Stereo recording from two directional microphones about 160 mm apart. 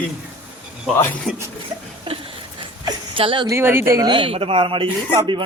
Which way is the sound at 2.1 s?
35° right (ahead or behind).